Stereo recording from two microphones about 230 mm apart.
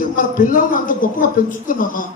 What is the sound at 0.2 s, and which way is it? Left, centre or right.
A man's voice, left.